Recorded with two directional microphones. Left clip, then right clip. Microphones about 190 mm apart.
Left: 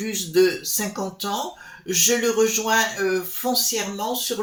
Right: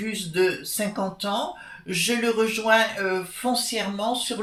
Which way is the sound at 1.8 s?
45° left (ahead or behind).